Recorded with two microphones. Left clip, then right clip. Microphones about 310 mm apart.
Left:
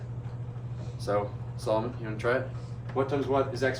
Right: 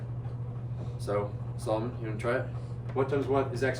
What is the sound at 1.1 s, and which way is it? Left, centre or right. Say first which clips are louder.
Speech: left 3 dB; centre.